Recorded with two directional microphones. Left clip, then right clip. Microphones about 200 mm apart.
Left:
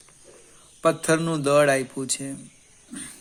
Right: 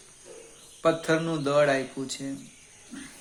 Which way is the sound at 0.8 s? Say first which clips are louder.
Left 3 dB; 50° left (ahead or behind).